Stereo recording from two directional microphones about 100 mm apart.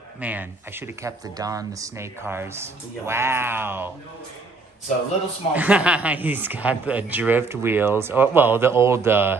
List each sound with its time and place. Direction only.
0.2 s speech: 15° right (ahead or behind)
1.2 s speech: 35° right (ahead or behind)
2.2 s speech: 25° right (ahead or behind)
5.5 s speech: 15° right (ahead or behind)